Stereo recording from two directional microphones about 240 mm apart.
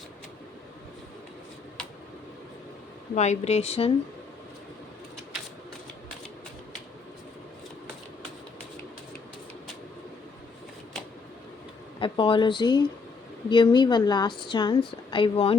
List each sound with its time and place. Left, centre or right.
3.2 s a woman's voice: left
11.9 s a woman's voice: left